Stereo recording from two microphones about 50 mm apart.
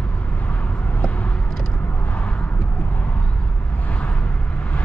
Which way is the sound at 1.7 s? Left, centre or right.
Left.